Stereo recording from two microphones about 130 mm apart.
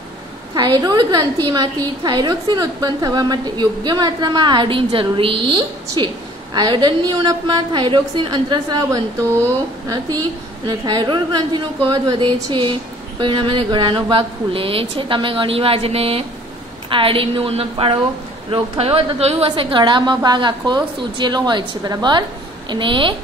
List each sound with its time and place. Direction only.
0.6 s a woman's voice: 35° right (ahead or behind)
10.7 s a woman's voice: 35° right (ahead or behind)